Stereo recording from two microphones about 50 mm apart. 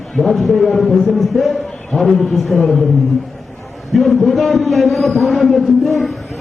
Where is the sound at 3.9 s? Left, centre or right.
Centre.